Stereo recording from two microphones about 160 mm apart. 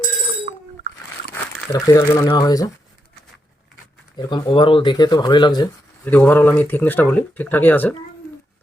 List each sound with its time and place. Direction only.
0.9 s biting: 50° right (ahead or behind)
1.7 s speech: 20° left (ahead or behind)
4.3 s speech: 30° left (ahead or behind)
6.1 s speech: 10° left (ahead or behind)